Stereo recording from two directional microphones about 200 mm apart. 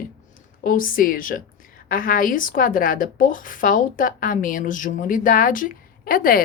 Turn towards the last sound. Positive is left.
turn(degrees=45)  # may be behind; listen again after turning